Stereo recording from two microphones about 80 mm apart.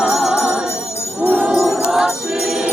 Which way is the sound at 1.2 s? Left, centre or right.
Right.